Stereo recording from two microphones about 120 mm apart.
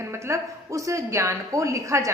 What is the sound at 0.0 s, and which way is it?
A woman's voice, 25° right (ahead or behind).